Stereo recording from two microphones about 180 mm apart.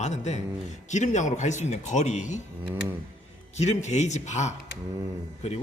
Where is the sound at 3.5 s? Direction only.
40° left (ahead or behind).